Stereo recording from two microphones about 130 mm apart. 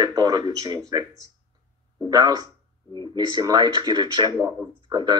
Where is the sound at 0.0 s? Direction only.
30° right (ahead or behind).